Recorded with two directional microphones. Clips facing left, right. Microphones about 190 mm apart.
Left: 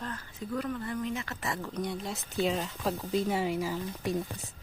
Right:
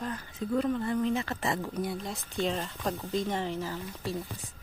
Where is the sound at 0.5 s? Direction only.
25° right (ahead or behind).